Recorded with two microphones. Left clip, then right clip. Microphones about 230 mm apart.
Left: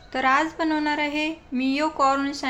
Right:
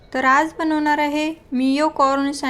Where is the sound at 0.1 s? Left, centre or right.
Centre.